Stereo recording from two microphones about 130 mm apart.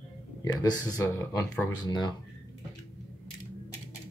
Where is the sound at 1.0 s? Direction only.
20° left (ahead or behind).